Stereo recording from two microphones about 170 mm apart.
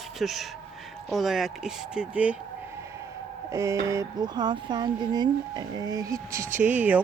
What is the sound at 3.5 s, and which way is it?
Speech, 15° right (ahead or behind).